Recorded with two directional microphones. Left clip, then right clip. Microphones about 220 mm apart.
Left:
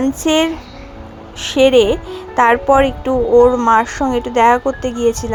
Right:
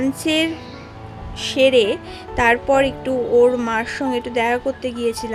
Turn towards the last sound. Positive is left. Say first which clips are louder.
# left 6 dB
turn(degrees=10)  # may be behind; listen again after turning